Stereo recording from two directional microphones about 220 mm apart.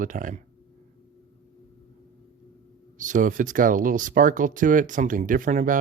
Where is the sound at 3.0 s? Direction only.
35° right (ahead or behind).